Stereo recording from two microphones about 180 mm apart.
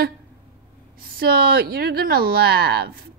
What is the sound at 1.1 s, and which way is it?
Speech, 55° right (ahead or behind).